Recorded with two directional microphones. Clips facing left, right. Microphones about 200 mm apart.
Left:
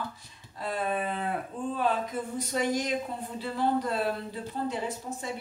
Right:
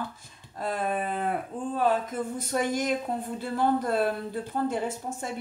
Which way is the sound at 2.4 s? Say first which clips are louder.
Right 1 dB; 50° right (ahead or behind).